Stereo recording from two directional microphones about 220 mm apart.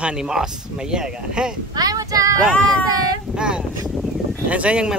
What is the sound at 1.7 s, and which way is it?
Speech, 15° right (ahead or behind).